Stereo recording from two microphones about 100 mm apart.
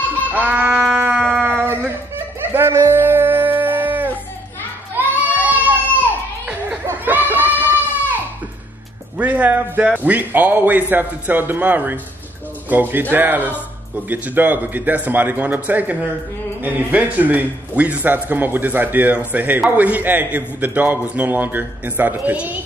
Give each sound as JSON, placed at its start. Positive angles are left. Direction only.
{"t": 0.3, "sound": "goat", "side_deg": -15}
{"t": 1.0, "sound": "music", "side_deg": -15}
{"t": 4.9, "sound": "child singing", "side_deg": -15}
{"t": 6.4, "sound": "goat", "side_deg": -15}
{"t": 9.2, "sound": "a man's voice", "side_deg": -15}